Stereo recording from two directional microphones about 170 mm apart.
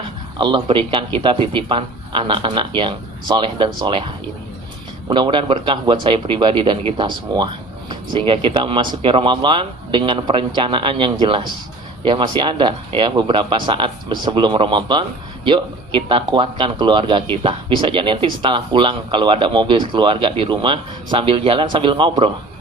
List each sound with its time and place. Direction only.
0.3 s speech: 25° right (ahead or behind)